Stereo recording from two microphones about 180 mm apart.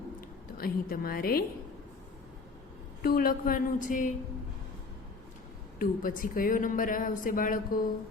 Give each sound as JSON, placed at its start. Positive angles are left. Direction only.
{"t": 0.2, "sound": "a woman's voice", "side_deg": 55}
{"t": 3.0, "sound": "speech", "side_deg": 55}
{"t": 5.8, "sound": "speech", "side_deg": 50}